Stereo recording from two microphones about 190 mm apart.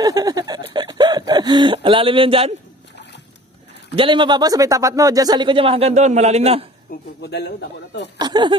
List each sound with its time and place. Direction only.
0.0 s a sound: 20° right (ahead or behind)
3.9 s speech: 25° right (ahead or behind)
7.2 s speech: 60° left (ahead or behind)
8.2 s speech: 25° right (ahead or behind)